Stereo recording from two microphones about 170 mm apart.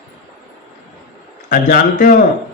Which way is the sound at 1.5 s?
60° left (ahead or behind).